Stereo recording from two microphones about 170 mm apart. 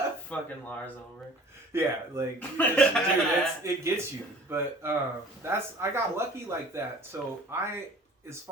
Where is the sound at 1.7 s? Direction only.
15° right (ahead or behind).